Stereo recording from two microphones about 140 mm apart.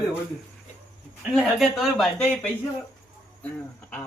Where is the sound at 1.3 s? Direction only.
Centre (ahead or behind).